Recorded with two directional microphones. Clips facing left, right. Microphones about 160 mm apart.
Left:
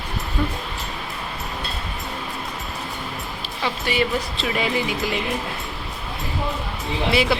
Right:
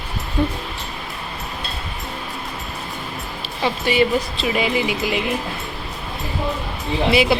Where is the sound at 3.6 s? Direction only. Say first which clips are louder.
Right 5 dB; 20° right (ahead or behind).